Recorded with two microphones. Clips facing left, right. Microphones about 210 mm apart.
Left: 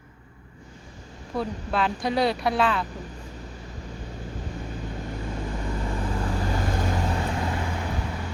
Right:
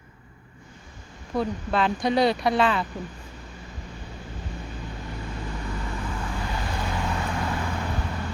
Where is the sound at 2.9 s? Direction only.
40° left (ahead or behind).